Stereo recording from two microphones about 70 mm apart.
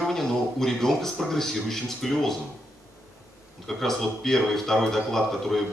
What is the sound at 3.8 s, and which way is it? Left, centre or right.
Speech, centre.